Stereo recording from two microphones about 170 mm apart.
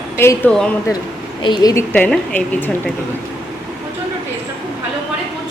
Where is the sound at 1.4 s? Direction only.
25° left (ahead or behind).